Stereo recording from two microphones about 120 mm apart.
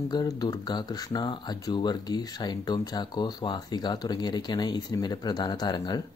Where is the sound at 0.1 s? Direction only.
35° left (ahead or behind).